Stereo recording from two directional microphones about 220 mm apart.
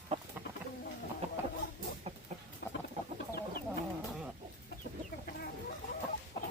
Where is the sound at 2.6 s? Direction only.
45° left (ahead or behind).